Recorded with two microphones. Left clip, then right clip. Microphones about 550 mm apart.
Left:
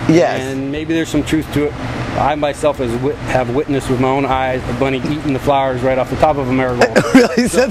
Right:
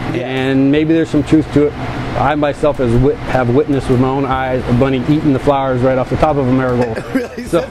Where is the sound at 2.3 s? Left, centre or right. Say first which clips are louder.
Right 2 dB; right.